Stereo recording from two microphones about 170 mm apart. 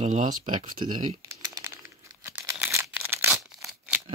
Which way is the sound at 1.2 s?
15° right (ahead or behind).